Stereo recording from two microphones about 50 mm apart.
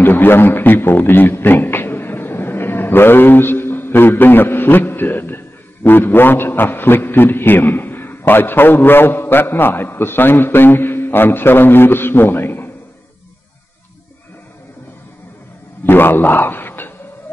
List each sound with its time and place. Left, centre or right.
0.0 s a man's voice: left
15.8 s a man's voice: left